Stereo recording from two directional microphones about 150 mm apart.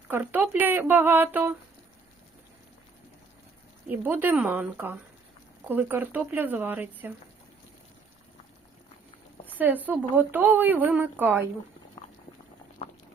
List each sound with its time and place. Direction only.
0.1 s a woman's voice: 10° right (ahead or behind)
4.0 s a woman's voice: 10° right (ahead or behind)
9.5 s a woman's voice: 10° right (ahead or behind)
12.8 s boiling: 40° left (ahead or behind)